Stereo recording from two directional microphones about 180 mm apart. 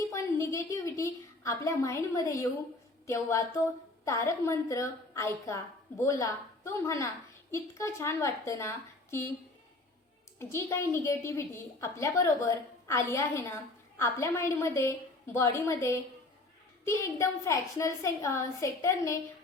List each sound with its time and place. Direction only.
0.1 s a sound: 15° left (ahead or behind)
3.1 s a woman's voice: 15° left (ahead or behind)
10.3 s a woman's voice: 15° left (ahead or behind)